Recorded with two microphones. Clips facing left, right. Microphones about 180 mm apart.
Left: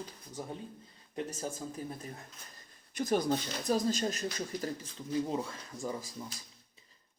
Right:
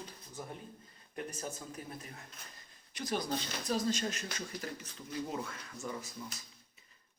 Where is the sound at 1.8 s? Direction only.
35° left (ahead or behind).